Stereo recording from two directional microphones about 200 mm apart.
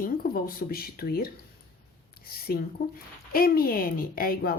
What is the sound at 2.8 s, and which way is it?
A woman's voice, 50° left (ahead or behind).